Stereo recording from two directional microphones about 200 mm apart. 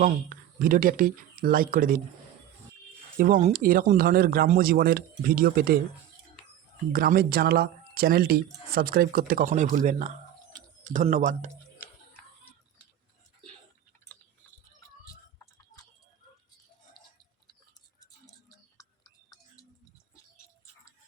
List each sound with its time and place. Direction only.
0.0 s speech: 45° right (ahead or behind)
3.2 s speech: 45° right (ahead or behind)
6.9 s speech: 45° right (ahead or behind)
18.0 s a sound: 15° left (ahead or behind)